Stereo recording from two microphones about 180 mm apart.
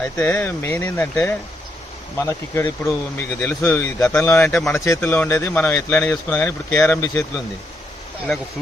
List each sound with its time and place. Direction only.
0.0 s speech: 10° left (ahead or behind)
4.4 s speech: 5° left (ahead or behind)